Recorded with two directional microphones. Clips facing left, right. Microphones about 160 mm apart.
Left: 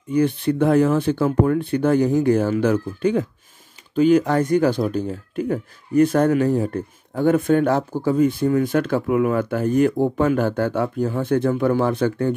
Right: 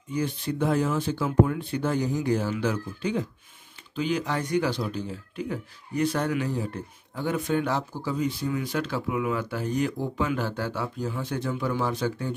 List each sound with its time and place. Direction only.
0.1 s speech: 60° left (ahead or behind)